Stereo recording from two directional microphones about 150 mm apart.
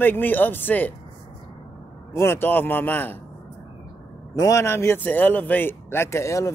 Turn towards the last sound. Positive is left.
turn(degrees=20)  # may be behind; listen again after turning